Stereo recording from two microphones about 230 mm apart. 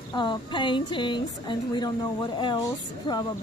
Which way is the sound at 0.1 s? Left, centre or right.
Centre.